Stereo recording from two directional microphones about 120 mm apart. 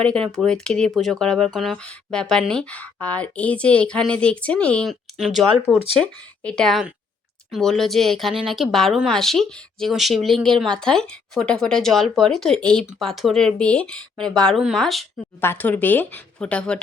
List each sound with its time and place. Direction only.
0.0 s a woman's voice: 5° left (ahead or behind)
4.9 s speech: centre (ahead or behind)
15.4 s a woman's voice: 15° left (ahead or behind)